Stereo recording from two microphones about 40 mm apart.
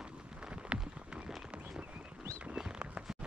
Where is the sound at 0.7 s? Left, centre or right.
Right.